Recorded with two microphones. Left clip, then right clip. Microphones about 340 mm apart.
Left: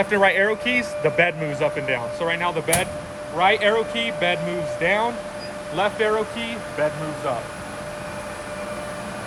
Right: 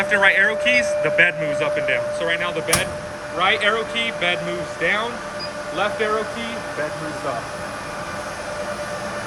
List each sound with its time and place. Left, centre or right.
0.0 s speech: centre